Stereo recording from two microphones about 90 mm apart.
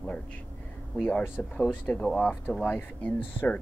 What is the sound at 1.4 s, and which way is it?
Speech, 15° left (ahead or behind).